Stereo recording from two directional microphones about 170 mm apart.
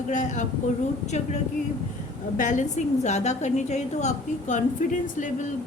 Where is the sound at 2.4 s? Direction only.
45° left (ahead or behind).